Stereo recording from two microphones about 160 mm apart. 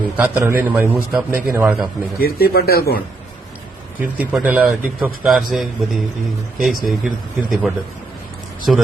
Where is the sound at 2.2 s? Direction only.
75° left (ahead or behind).